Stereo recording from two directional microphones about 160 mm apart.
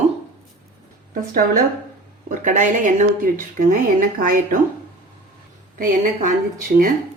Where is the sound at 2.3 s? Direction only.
50° right (ahead or behind).